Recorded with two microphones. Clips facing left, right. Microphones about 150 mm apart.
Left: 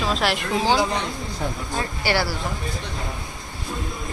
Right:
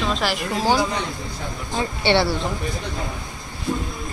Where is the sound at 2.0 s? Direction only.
25° right (ahead or behind).